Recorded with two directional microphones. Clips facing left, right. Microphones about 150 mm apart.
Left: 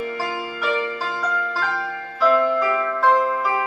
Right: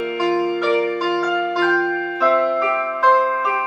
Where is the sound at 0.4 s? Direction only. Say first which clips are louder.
Right 5 dB; 35° right (ahead or behind).